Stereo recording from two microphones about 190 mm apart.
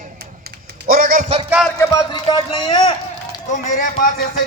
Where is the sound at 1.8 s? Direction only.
20° left (ahead or behind).